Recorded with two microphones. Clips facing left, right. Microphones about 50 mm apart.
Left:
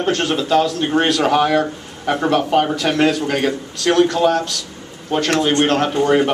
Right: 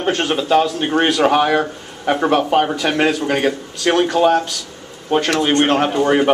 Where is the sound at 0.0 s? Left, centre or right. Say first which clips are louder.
Even; centre.